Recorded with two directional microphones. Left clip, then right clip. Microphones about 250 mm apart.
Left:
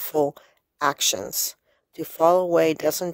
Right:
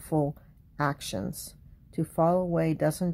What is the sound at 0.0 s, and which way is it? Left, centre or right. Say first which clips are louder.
Speech: left 6 dB; left.